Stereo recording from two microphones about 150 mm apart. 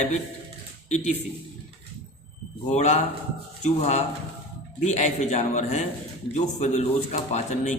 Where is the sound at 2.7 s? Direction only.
50° left (ahead or behind).